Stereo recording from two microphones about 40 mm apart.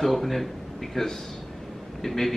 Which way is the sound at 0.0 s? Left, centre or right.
Centre.